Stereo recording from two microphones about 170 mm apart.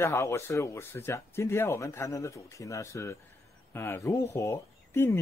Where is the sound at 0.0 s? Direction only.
15° left (ahead or behind).